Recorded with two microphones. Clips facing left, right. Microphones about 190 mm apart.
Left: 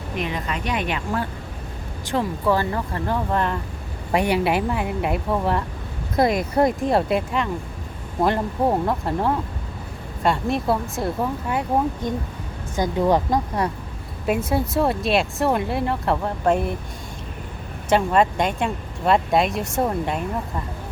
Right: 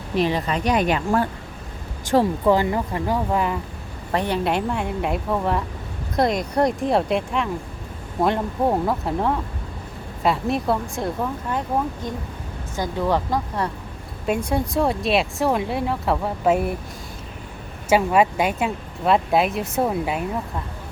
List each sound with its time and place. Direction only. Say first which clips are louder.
0.2 s speech: right 6 dB; 35° right (ahead or behind)
2.4 s speech: right 3 dB; 15° right (ahead or behind)
4.1 s speech: left 2 dB; 10° left (ahead or behind)
12.7 s speech: left 3 dB; 15° left (ahead or behind)
14.3 s speech: left 1 dB; 5° left (ahead or behind)
17.8 s speech: right 1 dB; 10° right (ahead or behind)